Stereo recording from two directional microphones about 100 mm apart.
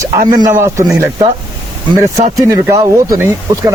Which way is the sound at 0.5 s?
30° right (ahead or behind).